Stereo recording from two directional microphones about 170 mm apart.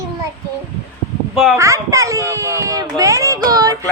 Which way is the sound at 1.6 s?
20° right (ahead or behind).